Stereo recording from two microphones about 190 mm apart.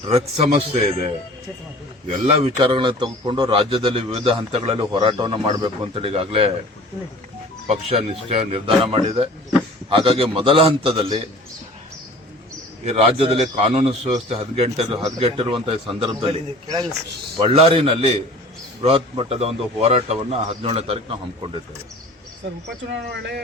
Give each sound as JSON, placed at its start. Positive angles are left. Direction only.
{"t": 0.1, "sound": "a man's voice", "side_deg": -30}
{"t": 2.0, "sound": "a man's voice", "side_deg": -35}
{"t": 7.7, "sound": "a man's voice", "side_deg": -35}
{"t": 12.8, "sound": "a man's voice", "side_deg": -35}
{"t": 17.3, "sound": "a man's voice", "side_deg": -30}
{"t": 23.1, "sound": "speech", "side_deg": -65}